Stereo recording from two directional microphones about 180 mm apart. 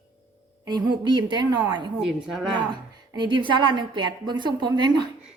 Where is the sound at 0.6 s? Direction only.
25° right (ahead or behind).